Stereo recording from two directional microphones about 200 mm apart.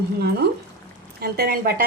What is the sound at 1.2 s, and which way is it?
Speech, 50° right (ahead or behind).